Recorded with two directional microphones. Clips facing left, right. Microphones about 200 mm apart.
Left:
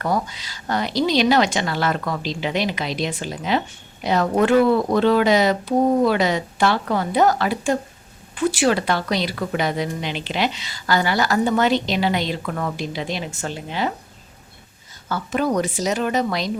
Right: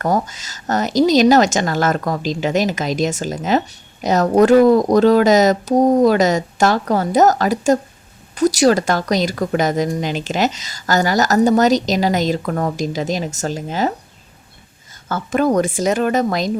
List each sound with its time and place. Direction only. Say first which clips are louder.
0.0 s a woman's voice: right 4 dB; 45° right (ahead or behind)
15.1 s a woman's voice: right 5 dB; 50° right (ahead or behind)